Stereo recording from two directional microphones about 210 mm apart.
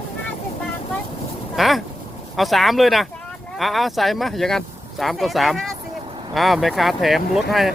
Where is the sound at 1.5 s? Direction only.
Centre (ahead or behind).